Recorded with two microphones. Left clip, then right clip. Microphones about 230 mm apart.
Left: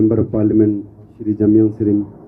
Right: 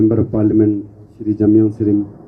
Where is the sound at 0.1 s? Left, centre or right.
Right.